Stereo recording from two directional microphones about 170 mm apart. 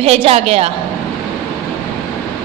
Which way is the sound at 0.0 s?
35° right (ahead or behind).